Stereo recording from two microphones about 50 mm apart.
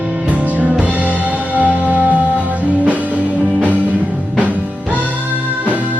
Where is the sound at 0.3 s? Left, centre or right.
Right.